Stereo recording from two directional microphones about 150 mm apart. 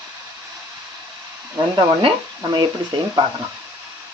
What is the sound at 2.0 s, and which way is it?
Speech, 35° right (ahead or behind).